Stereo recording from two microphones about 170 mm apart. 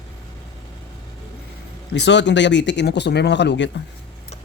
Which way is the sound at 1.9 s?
90° left.